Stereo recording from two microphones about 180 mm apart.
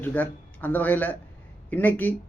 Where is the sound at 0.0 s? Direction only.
10° left (ahead or behind).